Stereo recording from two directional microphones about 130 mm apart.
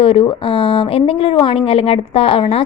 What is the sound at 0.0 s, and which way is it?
Speech, 45° left (ahead or behind).